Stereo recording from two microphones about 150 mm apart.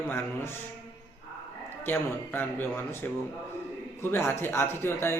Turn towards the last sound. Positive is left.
turn(degrees=15)  # may be behind; listen again after turning